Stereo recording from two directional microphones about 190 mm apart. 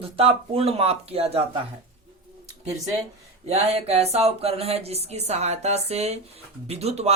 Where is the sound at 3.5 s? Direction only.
35° right (ahead or behind).